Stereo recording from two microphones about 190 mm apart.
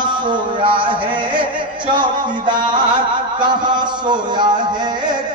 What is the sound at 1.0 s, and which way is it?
Music, 25° right (ahead or behind).